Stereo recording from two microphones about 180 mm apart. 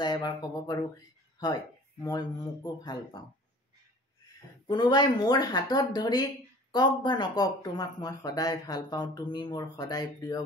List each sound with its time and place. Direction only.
0.0 s speech: 25° left (ahead or behind)
4.6 s speech: 25° left (ahead or behind)